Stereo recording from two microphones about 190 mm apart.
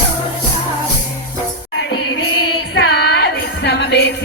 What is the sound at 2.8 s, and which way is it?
Music, 60° left (ahead or behind).